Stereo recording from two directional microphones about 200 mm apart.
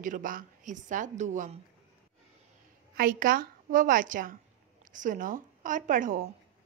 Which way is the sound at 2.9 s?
45° right (ahead or behind).